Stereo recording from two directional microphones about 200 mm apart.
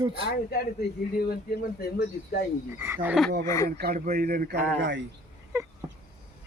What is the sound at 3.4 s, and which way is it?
Speech, 15° left (ahead or behind).